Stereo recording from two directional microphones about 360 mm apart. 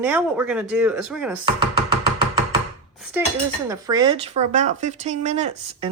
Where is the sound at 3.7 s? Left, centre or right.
Centre.